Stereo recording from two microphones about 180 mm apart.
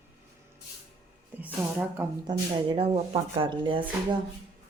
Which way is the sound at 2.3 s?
25° right (ahead or behind).